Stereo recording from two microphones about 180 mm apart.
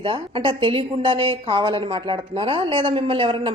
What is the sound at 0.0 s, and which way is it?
A woman's voice, 30° right (ahead or behind).